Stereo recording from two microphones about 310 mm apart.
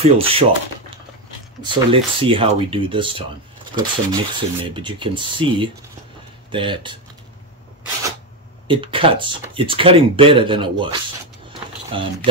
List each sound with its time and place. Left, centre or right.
0.0 s speech: centre
8.6 s speech: centre